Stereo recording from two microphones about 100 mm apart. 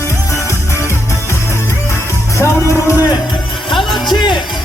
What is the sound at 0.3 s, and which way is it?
Music, 30° left (ahead or behind).